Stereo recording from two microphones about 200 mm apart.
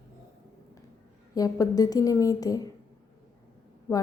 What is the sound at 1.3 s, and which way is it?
A woman's voice, 20° left (ahead or behind).